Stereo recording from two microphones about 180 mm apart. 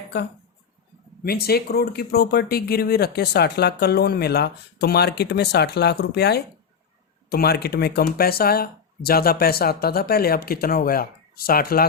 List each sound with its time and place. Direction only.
1.2 s speech: 60° left (ahead or behind)